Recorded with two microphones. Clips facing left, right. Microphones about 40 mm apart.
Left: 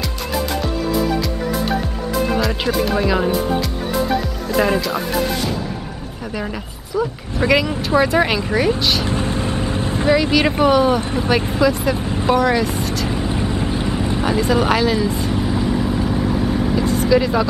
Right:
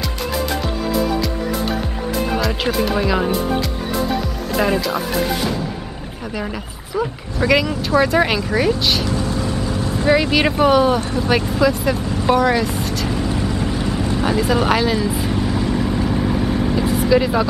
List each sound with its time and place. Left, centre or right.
2.3 s speech: centre
6.3 s speech: centre
9.0 s vehicle: left
10.6 s speech: centre
11.0 s speech: left
11.6 s speech: centre
13.1 s vehicle: centre
14.2 s speech: centre
15.4 s vehicle: centre